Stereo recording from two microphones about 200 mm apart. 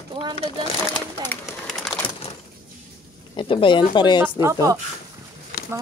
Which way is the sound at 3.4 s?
25° left (ahead or behind).